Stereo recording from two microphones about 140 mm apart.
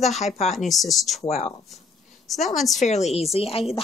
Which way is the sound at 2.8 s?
55° left (ahead or behind).